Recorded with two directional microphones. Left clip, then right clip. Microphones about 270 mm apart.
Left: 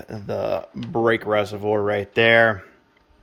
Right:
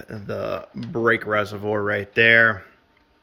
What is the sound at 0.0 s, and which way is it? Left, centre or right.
Speech, centre.